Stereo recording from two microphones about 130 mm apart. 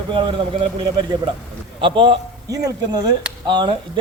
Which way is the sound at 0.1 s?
40° right (ahead or behind).